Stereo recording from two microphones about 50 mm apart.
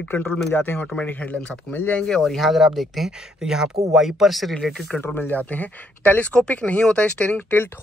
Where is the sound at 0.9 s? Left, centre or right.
Left.